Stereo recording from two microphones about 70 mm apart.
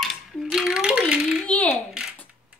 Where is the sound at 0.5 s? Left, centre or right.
Centre.